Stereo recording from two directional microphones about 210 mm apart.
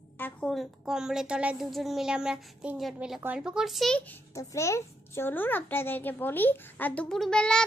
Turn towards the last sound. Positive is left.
turn(degrees=5)  # may be behind; listen again after turning